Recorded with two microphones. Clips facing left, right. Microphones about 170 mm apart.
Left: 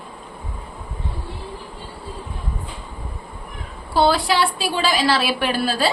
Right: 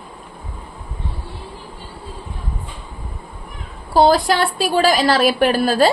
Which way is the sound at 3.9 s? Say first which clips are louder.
Right 4 dB; 40° right (ahead or behind).